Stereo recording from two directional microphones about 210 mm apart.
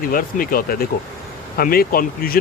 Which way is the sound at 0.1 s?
45° left (ahead or behind).